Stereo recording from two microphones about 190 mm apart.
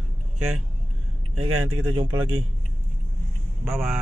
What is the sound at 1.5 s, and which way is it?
Speech, 90° right.